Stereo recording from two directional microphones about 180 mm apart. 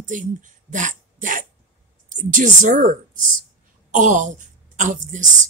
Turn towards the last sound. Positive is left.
turn(degrees=-45)  # may be behind; listen again after turning